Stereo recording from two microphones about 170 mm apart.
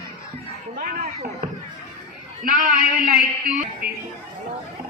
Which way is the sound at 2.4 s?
55° right (ahead or behind).